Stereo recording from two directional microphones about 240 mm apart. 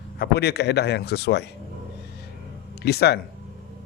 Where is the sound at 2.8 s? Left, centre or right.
Left.